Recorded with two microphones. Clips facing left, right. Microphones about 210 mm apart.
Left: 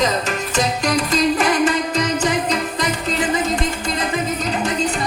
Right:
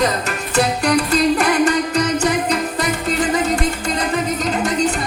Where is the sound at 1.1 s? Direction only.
40° right (ahead or behind).